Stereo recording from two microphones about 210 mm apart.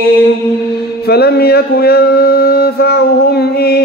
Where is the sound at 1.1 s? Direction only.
50° left (ahead or behind).